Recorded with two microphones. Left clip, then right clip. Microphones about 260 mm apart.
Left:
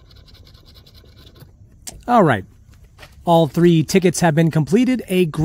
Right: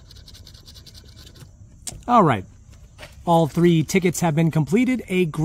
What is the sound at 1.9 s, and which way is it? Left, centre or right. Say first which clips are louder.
Speech: left 2 dB; left.